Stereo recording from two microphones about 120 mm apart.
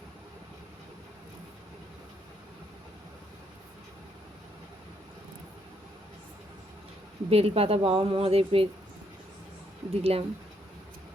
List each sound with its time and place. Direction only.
7.3 s a woman's voice: 55° right (ahead or behind)
9.9 s a woman's voice: 55° right (ahead or behind)